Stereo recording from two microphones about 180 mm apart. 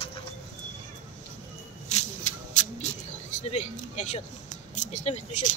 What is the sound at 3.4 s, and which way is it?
Speech, 40° left (ahead or behind).